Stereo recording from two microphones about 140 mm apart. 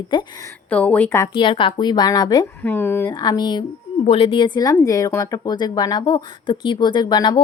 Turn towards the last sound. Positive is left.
turn(degrees=30)  # may be behind; listen again after turning